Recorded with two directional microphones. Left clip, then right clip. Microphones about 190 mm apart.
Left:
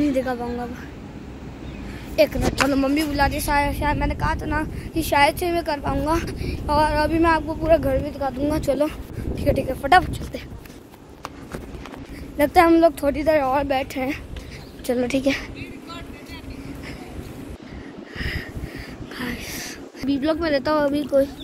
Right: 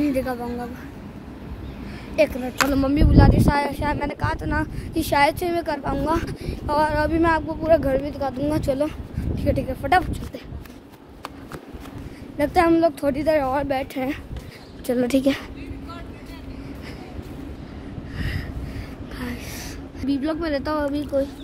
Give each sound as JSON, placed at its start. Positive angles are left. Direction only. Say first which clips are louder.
{"t": 0.0, "sound": "a woman's voice", "louder": "left 1 dB", "side_deg": 0}
{"t": 2.1, "sound": "a child's voice", "louder": "left 1 dB", "side_deg": 5}
{"t": 12.4, "sound": "a child's voice", "louder": "left 3 dB", "side_deg": 5}
{"t": 13.2, "sound": "a woman's voice", "louder": "left 2 dB", "side_deg": -10}
{"t": 14.9, "sound": "a woman's voice", "louder": "right 1 dB", "side_deg": -20}
{"t": 18.1, "sound": "a sound", "louder": "left 4 dB", "side_deg": 0}
{"t": 20.9, "sound": "a child's voice", "louder": "left 4 dB", "side_deg": 30}